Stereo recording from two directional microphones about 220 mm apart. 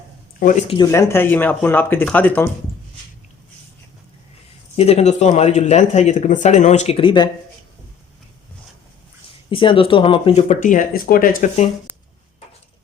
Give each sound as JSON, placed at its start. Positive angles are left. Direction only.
{"t": 0.3, "sound": "speech", "side_deg": 35}
{"t": 0.7, "sound": "speech", "side_deg": 15}
{"t": 4.8, "sound": "speech", "side_deg": 30}
{"t": 9.5, "sound": "speech", "side_deg": 25}